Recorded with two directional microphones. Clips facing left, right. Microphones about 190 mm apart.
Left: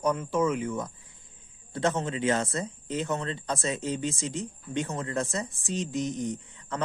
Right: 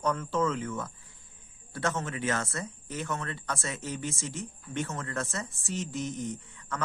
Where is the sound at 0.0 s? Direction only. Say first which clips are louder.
Left 3 dB; 15° left (ahead or behind).